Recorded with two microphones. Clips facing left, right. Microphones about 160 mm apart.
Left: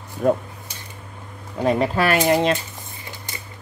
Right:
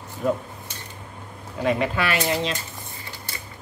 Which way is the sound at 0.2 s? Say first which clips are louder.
Left 5 dB; 55° left (ahead or behind).